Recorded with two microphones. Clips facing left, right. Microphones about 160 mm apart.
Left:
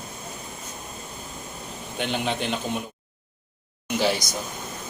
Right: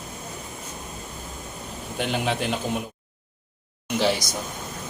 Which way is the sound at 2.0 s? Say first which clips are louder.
Right 1 dB; 5° right (ahead or behind).